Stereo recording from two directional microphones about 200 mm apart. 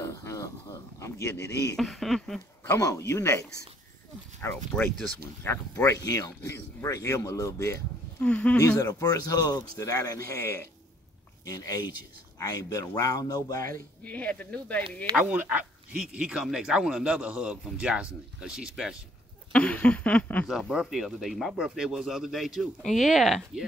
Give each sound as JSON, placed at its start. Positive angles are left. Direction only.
{"t": 0.0, "sound": "a sound", "side_deg": 15}
{"t": 0.9, "sound": "speech", "side_deg": 15}
{"t": 1.8, "sound": "speech", "side_deg": 0}
{"t": 2.7, "sound": "speech", "side_deg": 15}
{"t": 8.5, "sound": "speech", "side_deg": 15}
{"t": 14.0, "sound": "speech", "side_deg": 5}
{"t": 15.1, "sound": "speech", "side_deg": -5}